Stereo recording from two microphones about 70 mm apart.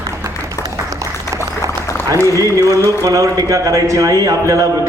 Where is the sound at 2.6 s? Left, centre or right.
Right.